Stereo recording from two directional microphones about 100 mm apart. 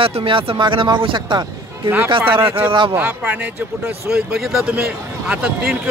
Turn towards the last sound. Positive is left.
turn(degrees=-15)  # may be behind; listen again after turning